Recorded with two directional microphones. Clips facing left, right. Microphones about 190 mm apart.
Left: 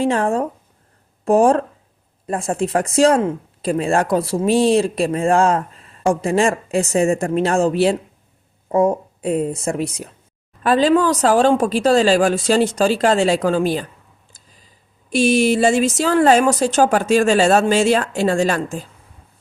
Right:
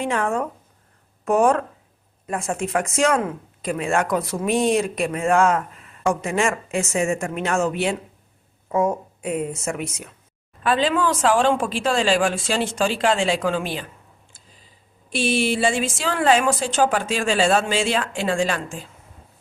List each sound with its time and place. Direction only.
0.0 s speech: 30° left (ahead or behind)
15.1 s speech: 45° left (ahead or behind)